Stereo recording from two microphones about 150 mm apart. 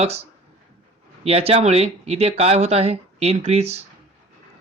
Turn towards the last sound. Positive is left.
turn(degrees=-45)  # may be behind; listen again after turning